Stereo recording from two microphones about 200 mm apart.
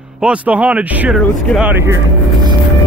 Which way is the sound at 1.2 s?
5° left (ahead or behind).